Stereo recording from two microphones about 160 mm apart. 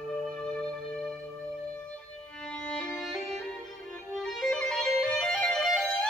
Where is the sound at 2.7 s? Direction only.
5° left (ahead or behind).